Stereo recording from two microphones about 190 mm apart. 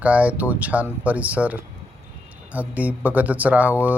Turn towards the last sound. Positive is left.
turn(degrees=-10)  # may be behind; listen again after turning